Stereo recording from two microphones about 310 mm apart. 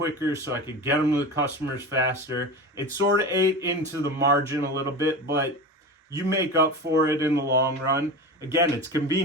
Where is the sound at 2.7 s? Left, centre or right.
Centre.